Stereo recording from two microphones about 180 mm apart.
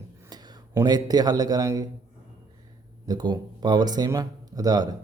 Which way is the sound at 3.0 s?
25° right (ahead or behind).